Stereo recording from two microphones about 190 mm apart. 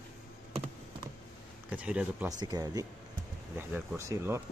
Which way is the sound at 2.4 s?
20° right (ahead or behind).